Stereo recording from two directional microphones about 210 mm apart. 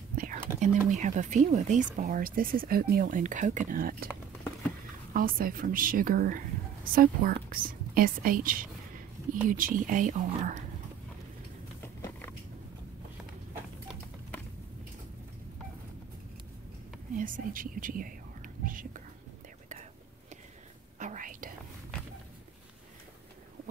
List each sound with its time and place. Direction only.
0.5 s whispering: 10° right (ahead or behind)
0.8 s speech: 35° right (ahead or behind)
5.1 s a woman's voice: 45° right (ahead or behind)
11.8 s a sound: 10° left (ahead or behind)
17.1 s whispering: 40° right (ahead or behind)
21.0 s whispering: 40° right (ahead or behind)